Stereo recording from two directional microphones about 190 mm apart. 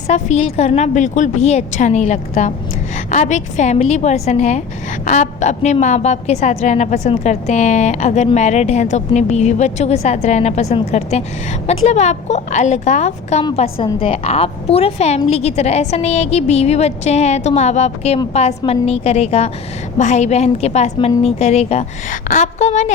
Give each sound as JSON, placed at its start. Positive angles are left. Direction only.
{"t": 0.1, "sound": "a woman's voice", "side_deg": 35}